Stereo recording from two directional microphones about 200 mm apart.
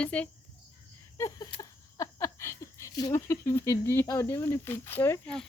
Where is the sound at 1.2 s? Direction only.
15° left (ahead or behind).